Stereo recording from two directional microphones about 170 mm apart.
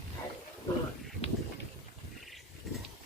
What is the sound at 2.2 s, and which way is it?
Wild animals, centre (ahead or behind).